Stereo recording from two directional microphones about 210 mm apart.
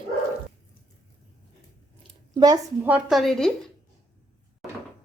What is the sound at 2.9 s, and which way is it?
Speech, centre (ahead or behind).